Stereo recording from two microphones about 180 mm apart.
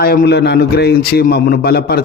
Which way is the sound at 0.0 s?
60° left (ahead or behind).